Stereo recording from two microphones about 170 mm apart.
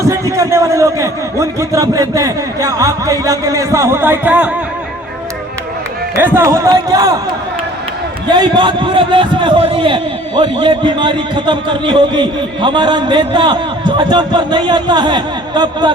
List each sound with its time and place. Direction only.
0.0 s a man's voice: 15° right (ahead or behind)
6.1 s a man's voice: 15° right (ahead or behind)